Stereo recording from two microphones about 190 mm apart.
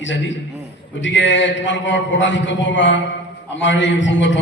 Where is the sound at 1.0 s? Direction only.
75° left (ahead or behind).